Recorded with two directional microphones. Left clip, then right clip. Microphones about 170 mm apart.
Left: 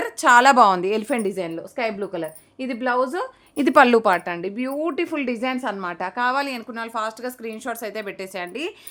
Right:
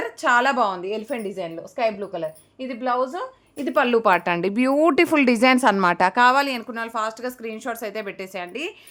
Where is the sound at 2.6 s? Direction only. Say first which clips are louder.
Left 1 dB; 40° left (ahead or behind).